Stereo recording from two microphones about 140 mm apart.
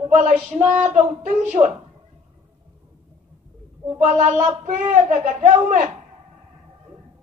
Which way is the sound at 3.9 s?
60° right (ahead or behind).